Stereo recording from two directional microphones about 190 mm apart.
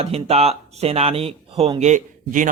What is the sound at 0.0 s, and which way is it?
Speech, 35° right (ahead or behind).